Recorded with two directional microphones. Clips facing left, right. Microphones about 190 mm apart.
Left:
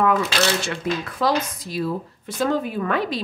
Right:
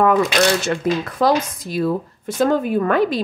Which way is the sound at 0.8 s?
45° right (ahead or behind).